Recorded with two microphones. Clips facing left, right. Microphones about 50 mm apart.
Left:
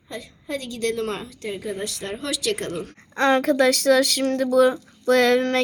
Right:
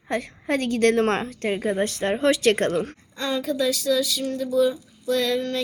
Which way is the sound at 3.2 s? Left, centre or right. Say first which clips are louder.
Left 7 dB; left.